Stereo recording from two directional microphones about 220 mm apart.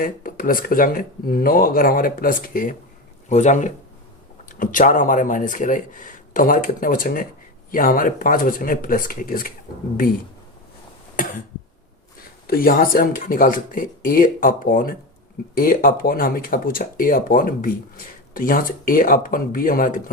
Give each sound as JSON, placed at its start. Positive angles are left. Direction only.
{"t": 0.0, "sound": "speech", "side_deg": 40}
{"t": 11.2, "sound": "cough", "side_deg": 40}
{"t": 12.5, "sound": "speech", "side_deg": 40}